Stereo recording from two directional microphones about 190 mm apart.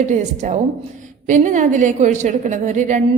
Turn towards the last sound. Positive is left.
turn(degrees=-40)  # may be behind; listen again after turning